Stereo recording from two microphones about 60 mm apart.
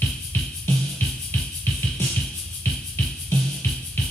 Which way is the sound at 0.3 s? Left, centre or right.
Left.